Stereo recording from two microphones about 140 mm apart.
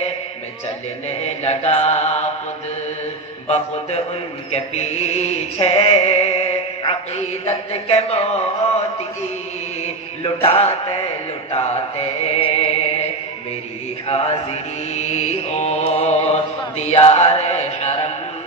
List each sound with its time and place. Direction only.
1.2 s mantra: 50° left (ahead or behind)
3.4 s mantra: 50° left (ahead or behind)
10.2 s mantra: 40° left (ahead or behind)
14.0 s mantra: 45° left (ahead or behind)